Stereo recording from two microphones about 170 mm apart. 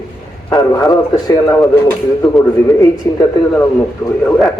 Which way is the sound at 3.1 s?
15° left (ahead or behind).